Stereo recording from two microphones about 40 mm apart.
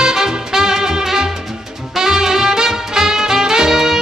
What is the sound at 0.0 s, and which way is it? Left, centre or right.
Music, centre.